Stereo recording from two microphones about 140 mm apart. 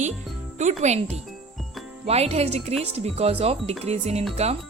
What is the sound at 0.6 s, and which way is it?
Speech, 55° right (ahead or behind).